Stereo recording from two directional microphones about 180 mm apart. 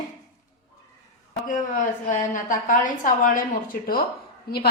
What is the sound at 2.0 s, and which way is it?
Speech, 45° left (ahead or behind).